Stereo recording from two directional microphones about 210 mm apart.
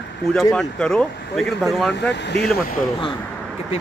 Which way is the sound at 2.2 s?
55° left (ahead or behind).